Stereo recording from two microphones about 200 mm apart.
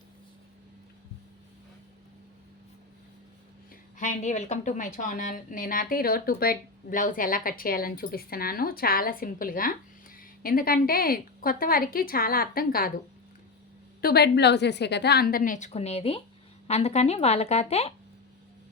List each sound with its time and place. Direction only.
3.9 s a woman's voice: 35° left (ahead or behind)
14.0 s a woman's voice: 55° left (ahead or behind); by 17.9 s 30° left (ahead or behind)